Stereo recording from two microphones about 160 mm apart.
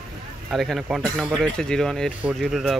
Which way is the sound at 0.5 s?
Centre (ahead or behind).